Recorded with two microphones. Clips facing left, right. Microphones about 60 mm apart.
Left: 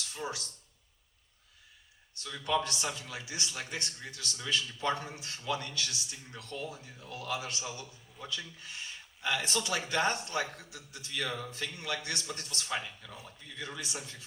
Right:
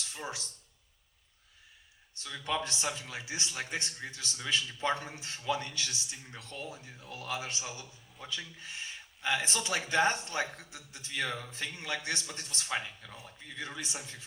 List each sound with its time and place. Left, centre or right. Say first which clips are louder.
0.1 s speech: left 2 dB; right
2.2 s a man's voice: left 3 dB; right